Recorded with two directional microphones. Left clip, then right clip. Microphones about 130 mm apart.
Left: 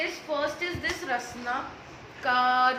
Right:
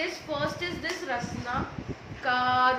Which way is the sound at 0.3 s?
10° left (ahead or behind).